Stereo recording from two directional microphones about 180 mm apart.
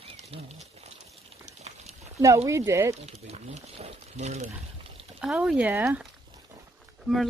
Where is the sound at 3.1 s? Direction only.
35° right (ahead or behind).